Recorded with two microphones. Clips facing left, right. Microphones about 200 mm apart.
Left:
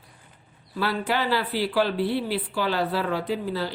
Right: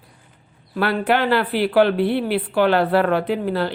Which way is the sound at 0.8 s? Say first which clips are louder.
Right 6 dB; 60° right (ahead or behind).